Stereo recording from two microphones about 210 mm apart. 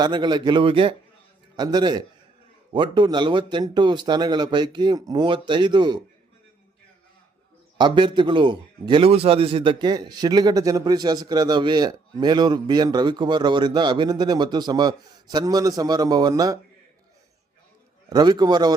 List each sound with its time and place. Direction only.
0.0 s a man's voice: 20° right (ahead or behind)
7.8 s a man's voice: 20° right (ahead or behind)
18.1 s a man's voice: 20° right (ahead or behind)